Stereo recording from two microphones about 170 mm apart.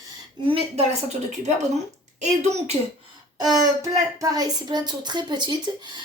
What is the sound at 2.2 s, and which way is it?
Speech, 40° right (ahead or behind).